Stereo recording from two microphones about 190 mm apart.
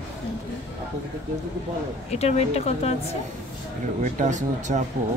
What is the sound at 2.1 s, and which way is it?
Speech, 35° left (ahead or behind).